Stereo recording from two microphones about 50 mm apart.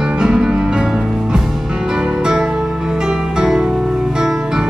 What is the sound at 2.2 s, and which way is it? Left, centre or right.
Music, centre.